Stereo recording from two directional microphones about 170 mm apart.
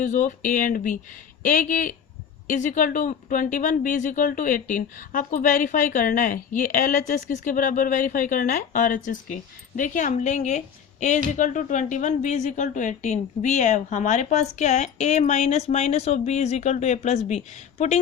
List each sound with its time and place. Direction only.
0.0 s a woman's voice: 50° left (ahead or behind)